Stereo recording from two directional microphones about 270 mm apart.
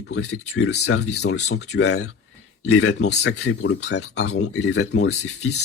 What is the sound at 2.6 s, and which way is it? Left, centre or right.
Speech, left.